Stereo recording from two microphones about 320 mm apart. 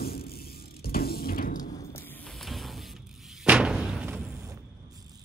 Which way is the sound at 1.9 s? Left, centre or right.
Centre.